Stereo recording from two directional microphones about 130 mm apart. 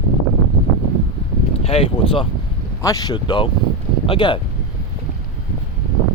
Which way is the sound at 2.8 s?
30° left (ahead or behind).